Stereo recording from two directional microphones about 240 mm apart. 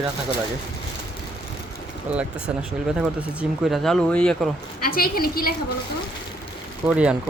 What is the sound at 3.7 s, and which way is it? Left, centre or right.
Speech, centre.